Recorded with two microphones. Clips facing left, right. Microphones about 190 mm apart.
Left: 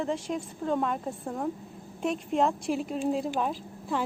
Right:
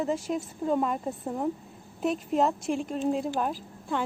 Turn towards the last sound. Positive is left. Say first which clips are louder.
# even
turn(degrees=0)  # may be behind; listen again after turning